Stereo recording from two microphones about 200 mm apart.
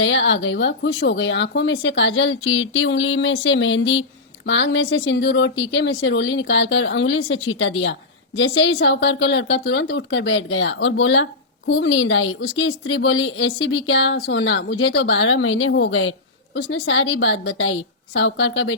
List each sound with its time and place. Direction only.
0.0 s a woman's voice: 65° left (ahead or behind)